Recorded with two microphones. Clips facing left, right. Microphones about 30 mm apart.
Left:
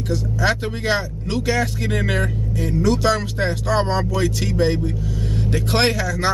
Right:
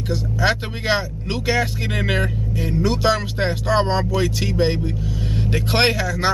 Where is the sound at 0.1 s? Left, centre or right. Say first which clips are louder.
Even; centre.